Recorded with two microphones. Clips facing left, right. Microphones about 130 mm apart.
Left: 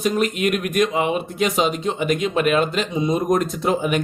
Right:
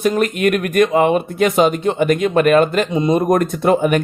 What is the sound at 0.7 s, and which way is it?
Speech, 55° right (ahead or behind).